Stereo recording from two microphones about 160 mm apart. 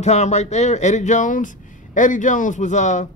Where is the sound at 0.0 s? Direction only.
45° left (ahead or behind).